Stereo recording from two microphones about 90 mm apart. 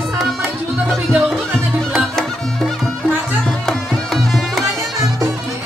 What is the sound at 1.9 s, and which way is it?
Music, 5° left (ahead or behind).